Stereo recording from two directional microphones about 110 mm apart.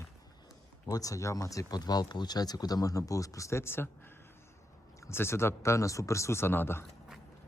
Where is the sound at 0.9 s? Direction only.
30° left (ahead or behind).